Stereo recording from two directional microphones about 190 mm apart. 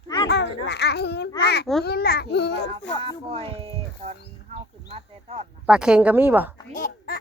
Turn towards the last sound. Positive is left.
turn(degrees=50)  # may be behind; listen again after turning